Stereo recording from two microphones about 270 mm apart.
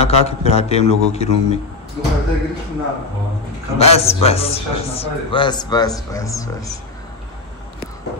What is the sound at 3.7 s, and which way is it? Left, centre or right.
A man's voice, left.